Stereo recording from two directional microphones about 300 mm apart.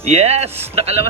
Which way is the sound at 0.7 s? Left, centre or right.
Right.